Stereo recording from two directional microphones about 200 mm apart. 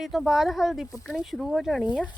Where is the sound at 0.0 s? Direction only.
Centre (ahead or behind).